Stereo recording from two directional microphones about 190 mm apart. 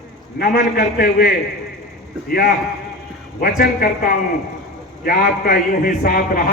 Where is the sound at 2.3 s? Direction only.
55° left (ahead or behind).